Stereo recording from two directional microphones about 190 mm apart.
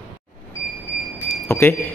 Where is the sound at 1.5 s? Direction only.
15° left (ahead or behind).